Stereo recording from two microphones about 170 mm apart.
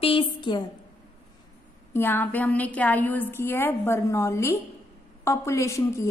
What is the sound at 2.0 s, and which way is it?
A woman's voice, 10° left (ahead or behind).